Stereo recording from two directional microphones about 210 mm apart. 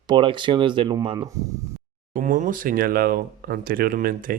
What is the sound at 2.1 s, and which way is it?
Speech, 40° right (ahead or behind).